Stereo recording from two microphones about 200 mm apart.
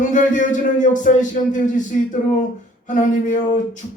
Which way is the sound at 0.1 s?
40° left (ahead or behind).